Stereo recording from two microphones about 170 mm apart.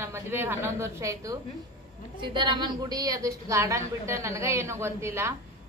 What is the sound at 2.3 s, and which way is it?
A woman's voice, 25° right (ahead or behind).